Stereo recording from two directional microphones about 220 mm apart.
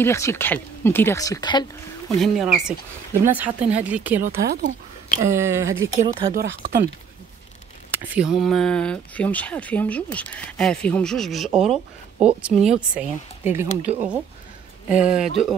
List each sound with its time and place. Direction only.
0.0 s speech: 10° left (ahead or behind)
2.1 s speech: centre (ahead or behind)
4.5 s speech: 45° right (ahead or behind)
5.3 s speech: 10° right (ahead or behind)
6.3 s speech: 45° right (ahead or behind)
8.0 s speech: 5° right (ahead or behind)
11.6 s speech: 30° right (ahead or behind)
12.4 s speech: 5° right (ahead or behind)